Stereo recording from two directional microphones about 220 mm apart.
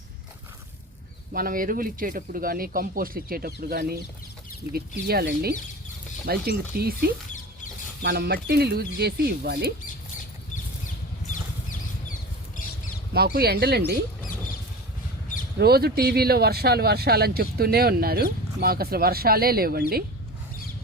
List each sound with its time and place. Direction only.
1.3 s speech: 40° right (ahead or behind)
13.1 s speech: 45° right (ahead or behind)
15.5 s speech: 45° right (ahead or behind)